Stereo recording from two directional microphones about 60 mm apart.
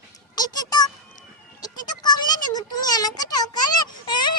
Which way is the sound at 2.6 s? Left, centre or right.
Left.